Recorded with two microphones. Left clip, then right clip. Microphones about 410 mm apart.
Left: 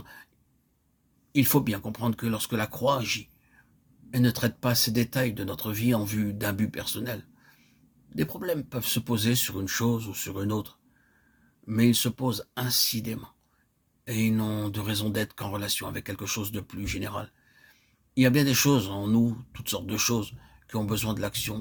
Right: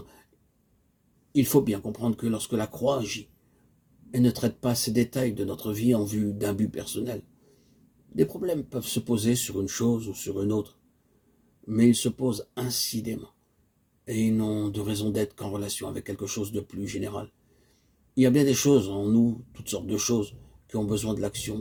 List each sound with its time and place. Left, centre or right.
1.3 s speech: left